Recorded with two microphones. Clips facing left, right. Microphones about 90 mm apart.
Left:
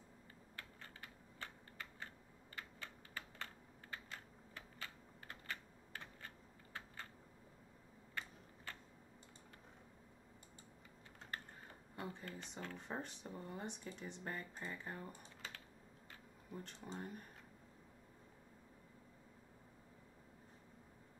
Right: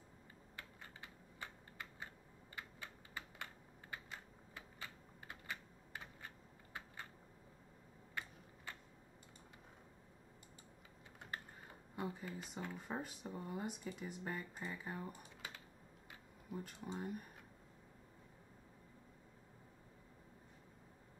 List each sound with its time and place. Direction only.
0.6 s typing: 15° right (ahead or behind)
8.1 s tick-tock: 15° right (ahead or behind)
11.9 s speech: 10° right (ahead or behind)